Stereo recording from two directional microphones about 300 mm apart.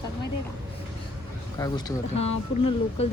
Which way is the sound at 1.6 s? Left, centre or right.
Centre.